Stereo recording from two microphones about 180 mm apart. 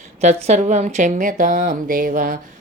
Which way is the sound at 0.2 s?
35° right (ahead or behind).